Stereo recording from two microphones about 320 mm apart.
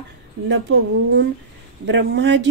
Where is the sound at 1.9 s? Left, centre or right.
Right.